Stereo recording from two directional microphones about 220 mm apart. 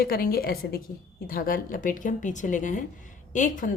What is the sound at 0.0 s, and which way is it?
A woman's voice, 45° left (ahead or behind).